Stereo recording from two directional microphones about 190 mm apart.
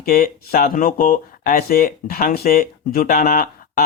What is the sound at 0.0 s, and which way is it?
Speech, 50° left (ahead or behind).